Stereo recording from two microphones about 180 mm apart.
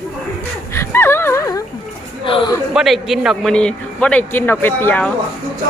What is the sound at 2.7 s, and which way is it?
A man's voice, centre (ahead or behind).